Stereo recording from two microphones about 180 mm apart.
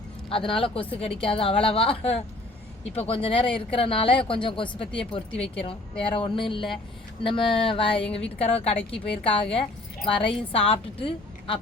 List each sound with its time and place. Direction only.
0.3 s a woman's voice: 30° left (ahead or behind)